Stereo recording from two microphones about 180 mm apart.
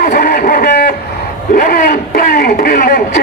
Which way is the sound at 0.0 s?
55° left (ahead or behind).